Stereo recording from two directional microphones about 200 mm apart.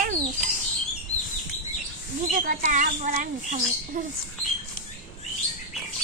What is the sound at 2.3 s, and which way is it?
Speech, 40° right (ahead or behind).